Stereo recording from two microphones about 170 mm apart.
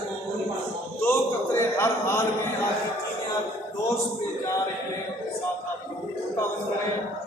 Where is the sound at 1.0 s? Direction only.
15° left (ahead or behind).